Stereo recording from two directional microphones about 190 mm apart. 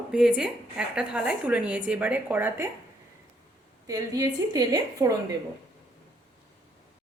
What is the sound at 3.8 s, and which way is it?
A woman's voice, 20° right (ahead or behind).